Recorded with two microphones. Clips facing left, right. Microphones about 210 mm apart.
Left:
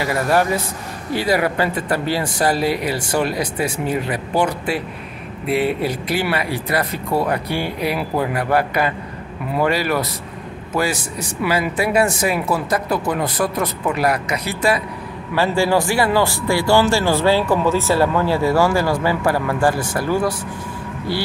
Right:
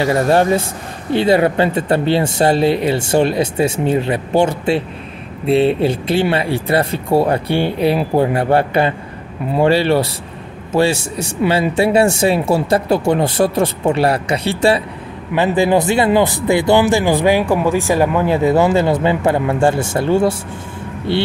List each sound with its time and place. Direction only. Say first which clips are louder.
0.0 s speech: right 5 dB; 25° right (ahead or behind)